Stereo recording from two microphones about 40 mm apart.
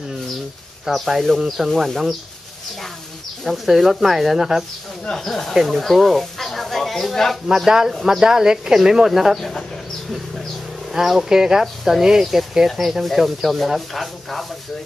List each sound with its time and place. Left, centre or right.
0.8 s speech: centre
3.4 s speech: centre
5.1 s speech: centre
5.5 s a sound: centre
7.5 s speech: centre
9.4 s speech: centre
10.9 s speech: centre